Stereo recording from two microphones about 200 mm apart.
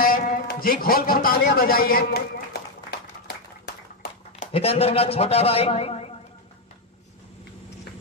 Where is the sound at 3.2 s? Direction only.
55° left (ahead or behind).